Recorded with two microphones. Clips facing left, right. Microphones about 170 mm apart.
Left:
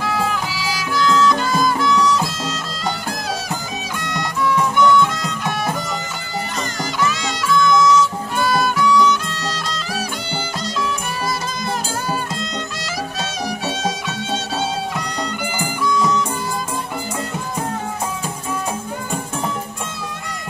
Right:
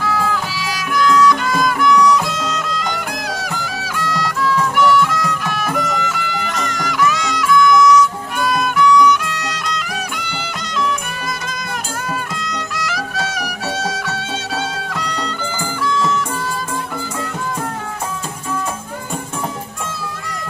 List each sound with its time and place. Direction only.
0.0 s music: 20° left (ahead or behind)
12.1 s music: 25° left (ahead or behind)
15.4 s music: 15° left (ahead or behind)